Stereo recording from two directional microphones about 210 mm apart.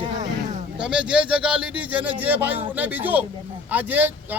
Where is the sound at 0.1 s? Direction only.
35° right (ahead or behind).